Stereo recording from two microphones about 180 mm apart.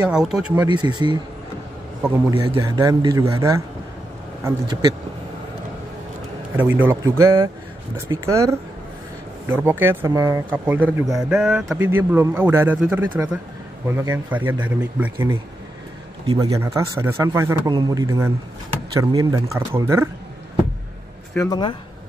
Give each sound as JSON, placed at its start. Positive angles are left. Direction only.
{"t": 0.1, "sound": "speech", "side_deg": -5}
{"t": 0.6, "sound": "speech", "side_deg": -25}
{"t": 2.5, "sound": "speech", "side_deg": -25}
{"t": 6.5, "sound": "speech", "side_deg": -10}
{"t": 11.2, "sound": "speech", "side_deg": -5}
{"t": 21.5, "sound": "speech", "side_deg": 25}